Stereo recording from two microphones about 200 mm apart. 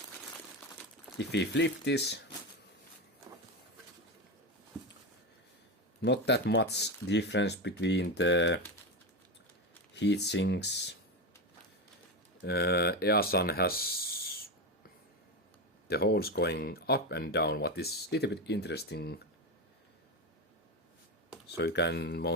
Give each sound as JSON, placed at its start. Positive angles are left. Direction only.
{"t": 1.2, "sound": "speech", "side_deg": 60}
{"t": 6.0, "sound": "speech", "side_deg": 60}
{"t": 9.9, "sound": "speech", "side_deg": 60}
{"t": 12.4, "sound": "speech", "side_deg": 55}
{"t": 15.9, "sound": "speech", "side_deg": 50}
{"t": 21.4, "sound": "speech", "side_deg": 55}